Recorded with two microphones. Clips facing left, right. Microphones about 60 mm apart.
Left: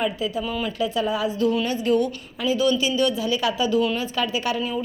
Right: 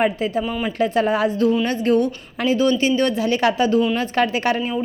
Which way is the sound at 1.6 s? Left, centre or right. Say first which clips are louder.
Right 3 dB; right.